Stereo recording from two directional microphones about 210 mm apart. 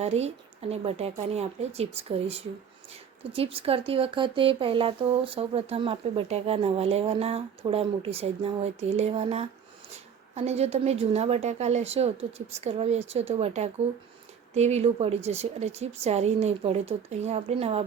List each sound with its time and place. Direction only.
0.0 s speech: 30° right (ahead or behind)